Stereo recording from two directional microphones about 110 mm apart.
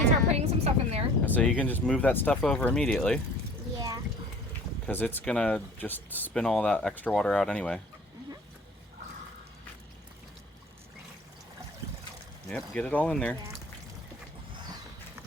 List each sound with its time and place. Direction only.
0.3 s a sound: 75° right (ahead or behind)
1.2 s a sound: 15° left (ahead or behind)
1.5 s speech: 15° left (ahead or behind)
2.4 s speech: 5° left (ahead or behind)
3.8 s a sound: 35° right (ahead or behind)
4.9 s speech: 15° left (ahead or behind)
5.2 s speech: 5° left (ahead or behind)
6.3 s speech: 5° left (ahead or behind)
12.5 s speech: 10° left (ahead or behind)